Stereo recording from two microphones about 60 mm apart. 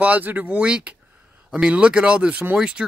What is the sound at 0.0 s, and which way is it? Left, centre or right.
Speech, right.